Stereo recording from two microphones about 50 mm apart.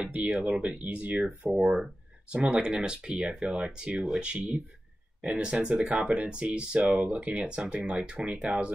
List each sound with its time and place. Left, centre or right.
0.0 s speech: right
1.6 s speech: centre